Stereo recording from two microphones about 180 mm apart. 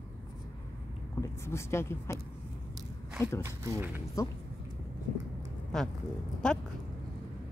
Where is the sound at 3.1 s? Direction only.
15° left (ahead or behind).